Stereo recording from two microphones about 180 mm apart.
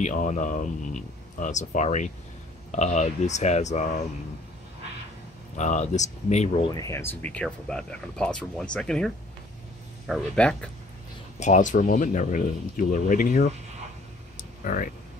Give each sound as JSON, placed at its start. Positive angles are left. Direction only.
{"t": 0.0, "sound": "speech", "side_deg": 45}
{"t": 5.6, "sound": "speech", "side_deg": 40}
{"t": 6.7, "sound": "speech", "side_deg": 15}
{"t": 11.3, "sound": "speech", "side_deg": 40}
{"t": 14.6, "sound": "speech", "side_deg": 50}